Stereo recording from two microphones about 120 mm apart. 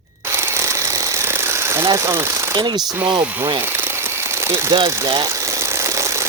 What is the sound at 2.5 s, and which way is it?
Speech, 35° right (ahead or behind).